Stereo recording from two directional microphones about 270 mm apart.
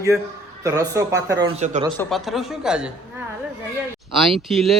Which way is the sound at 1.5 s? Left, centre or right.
Right.